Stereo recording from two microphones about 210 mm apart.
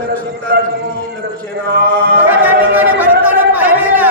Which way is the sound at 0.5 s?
45° right (ahead or behind).